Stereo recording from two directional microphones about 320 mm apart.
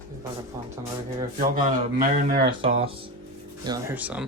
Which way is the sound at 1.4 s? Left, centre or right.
Right.